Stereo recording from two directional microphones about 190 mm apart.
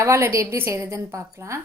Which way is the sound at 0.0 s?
15° right (ahead or behind).